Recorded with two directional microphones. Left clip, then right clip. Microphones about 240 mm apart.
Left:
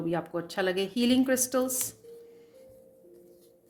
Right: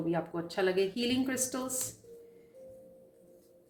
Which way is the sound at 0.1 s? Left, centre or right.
Left.